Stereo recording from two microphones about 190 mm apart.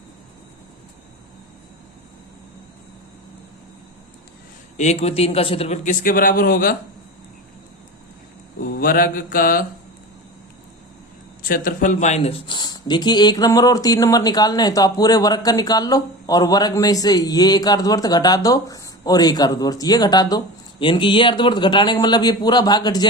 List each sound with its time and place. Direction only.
4.8 s a man's voice: 35° left (ahead or behind)
8.6 s mantra: 50° left (ahead or behind)
11.4 s speech: 50° left (ahead or behind); by 23.0 s 20° left (ahead or behind)